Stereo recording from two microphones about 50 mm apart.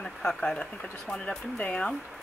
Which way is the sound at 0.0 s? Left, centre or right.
Centre.